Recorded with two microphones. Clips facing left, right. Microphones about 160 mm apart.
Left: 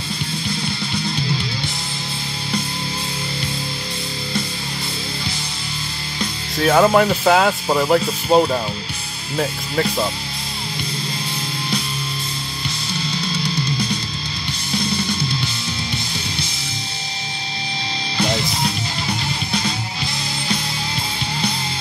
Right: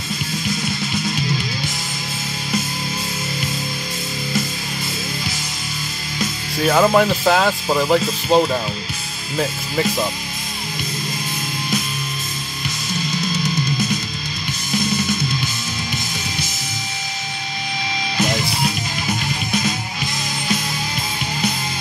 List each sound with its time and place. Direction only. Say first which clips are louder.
6.6 s speech: left 1 dB; centre (ahead or behind)
13.4 s music: even; 35° left (ahead or behind)
19.0 s music: right 3 dB; 30° left (ahead or behind)